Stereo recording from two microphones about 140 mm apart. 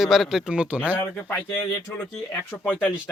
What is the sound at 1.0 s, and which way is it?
Speech, 15° left (ahead or behind).